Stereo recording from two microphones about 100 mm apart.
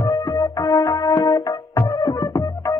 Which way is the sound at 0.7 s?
40° left (ahead or behind).